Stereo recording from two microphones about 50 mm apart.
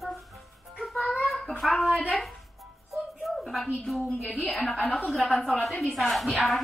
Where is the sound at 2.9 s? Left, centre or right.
Centre.